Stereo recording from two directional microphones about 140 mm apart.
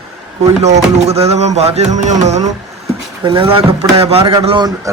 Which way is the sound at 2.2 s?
55° right (ahead or behind).